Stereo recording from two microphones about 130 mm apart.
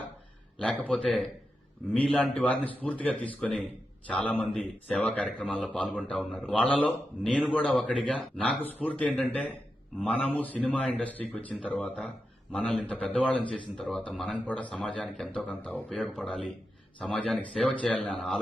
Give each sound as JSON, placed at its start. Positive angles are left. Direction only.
{"t": 0.8, "sound": "a man's voice", "side_deg": 10}